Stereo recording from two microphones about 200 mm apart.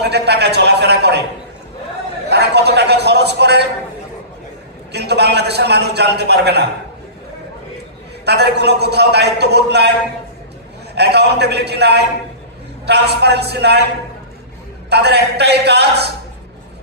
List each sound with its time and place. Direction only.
0.0 s a man's voice: 55° right (ahead or behind)
2.2 s a man's voice: 55° right (ahead or behind)
4.9 s a man's voice: 55° right (ahead or behind)
8.3 s a man's voice: 55° right (ahead or behind)
11.0 s a man's voice: 55° right (ahead or behind)
14.9 s a man's voice: 55° right (ahead or behind)